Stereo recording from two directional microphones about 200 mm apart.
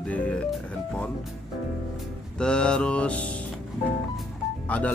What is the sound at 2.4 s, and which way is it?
Speech, 5° left (ahead or behind).